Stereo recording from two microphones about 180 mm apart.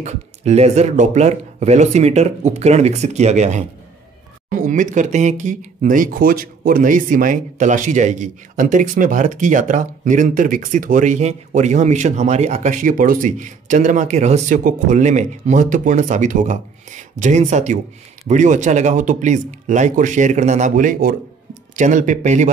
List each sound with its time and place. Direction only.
0.0 s speech: 40° right (ahead or behind)